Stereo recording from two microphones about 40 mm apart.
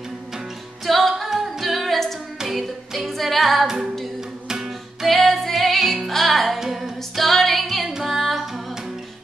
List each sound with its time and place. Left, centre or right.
0.8 s music: centre
1.3 s singing: centre
2.3 s music: centre
3.6 s a capella: centre
4.5 s music: centre
5.0 s music: centre
6.6 s female singing: centre
7.9 s music: centre